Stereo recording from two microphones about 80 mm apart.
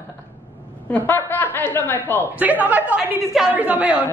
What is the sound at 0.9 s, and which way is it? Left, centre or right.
A woman's voice, left.